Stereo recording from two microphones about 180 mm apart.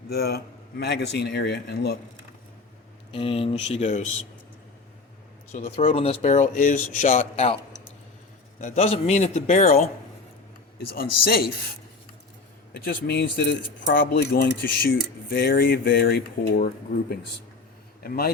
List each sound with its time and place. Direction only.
0.1 s speech: 60° left (ahead or behind)
3.1 s speech: 30° left (ahead or behind)
5.5 s speech: 35° left (ahead or behind)
8.6 s speech: 35° left (ahead or behind)
10.8 s speech: 55° left (ahead or behind)
12.7 s a man's voice: 60° left (ahead or behind)